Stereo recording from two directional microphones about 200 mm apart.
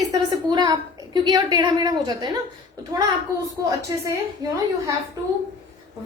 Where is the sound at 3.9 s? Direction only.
15° right (ahead or behind).